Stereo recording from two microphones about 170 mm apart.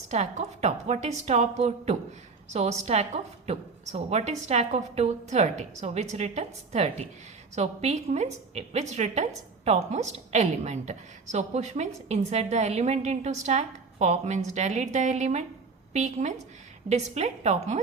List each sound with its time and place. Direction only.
0.1 s a woman's voice: 40° right (ahead or behind)